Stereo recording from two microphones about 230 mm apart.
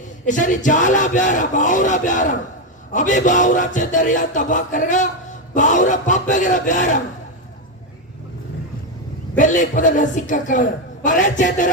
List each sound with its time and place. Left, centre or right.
0.3 s a man's voice: left
9.4 s a man's voice: left